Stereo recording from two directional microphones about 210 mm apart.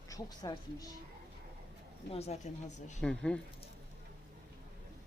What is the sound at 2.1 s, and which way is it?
Speech, 30° left (ahead or behind).